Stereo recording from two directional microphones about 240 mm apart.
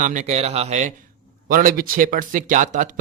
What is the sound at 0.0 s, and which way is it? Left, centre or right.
A man's voice, right.